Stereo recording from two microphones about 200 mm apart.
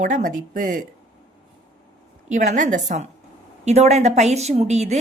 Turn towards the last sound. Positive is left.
turn(degrees=-35)  # may be behind; listen again after turning